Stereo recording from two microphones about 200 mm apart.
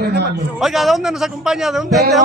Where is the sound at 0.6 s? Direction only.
Centre (ahead or behind).